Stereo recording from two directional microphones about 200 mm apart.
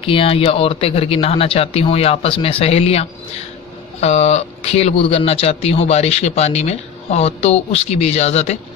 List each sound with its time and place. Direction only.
0.0 s speech: 25° left (ahead or behind)